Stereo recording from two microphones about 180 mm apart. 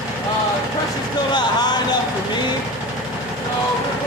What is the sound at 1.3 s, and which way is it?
Speech, 25° left (ahead or behind).